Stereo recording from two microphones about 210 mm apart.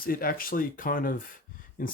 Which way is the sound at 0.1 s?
45° left (ahead or behind).